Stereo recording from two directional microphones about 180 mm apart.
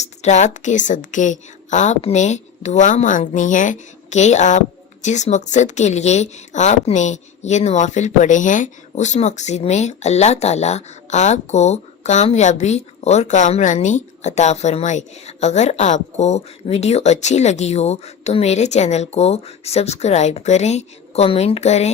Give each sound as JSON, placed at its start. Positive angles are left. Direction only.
{"t": 0.0, "sound": "a woman's voice", "side_deg": 40}